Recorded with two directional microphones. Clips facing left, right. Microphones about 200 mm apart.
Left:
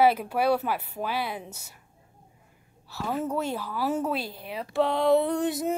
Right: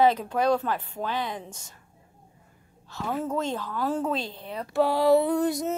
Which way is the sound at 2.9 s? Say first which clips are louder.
Even; 5° left (ahead or behind).